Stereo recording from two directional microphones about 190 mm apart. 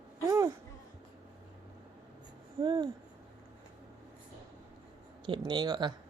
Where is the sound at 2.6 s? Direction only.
25° right (ahead or behind).